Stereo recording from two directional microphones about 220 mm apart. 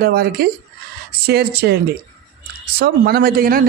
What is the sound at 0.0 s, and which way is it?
Speech, 45° right (ahead or behind).